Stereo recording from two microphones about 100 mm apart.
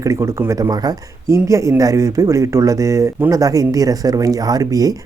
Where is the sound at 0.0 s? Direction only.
30° right (ahead or behind).